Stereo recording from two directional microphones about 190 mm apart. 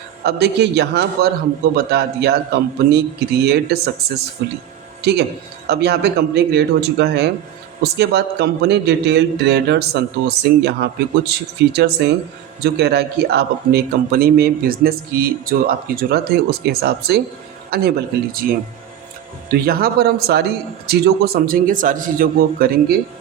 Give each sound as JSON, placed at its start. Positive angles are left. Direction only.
{"t": 0.3, "sound": "a man's voice", "side_deg": -60}
{"t": 5.6, "sound": "a man's voice", "side_deg": -60}